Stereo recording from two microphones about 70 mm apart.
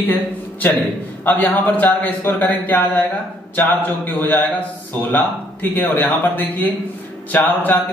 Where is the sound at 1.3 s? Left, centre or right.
Left.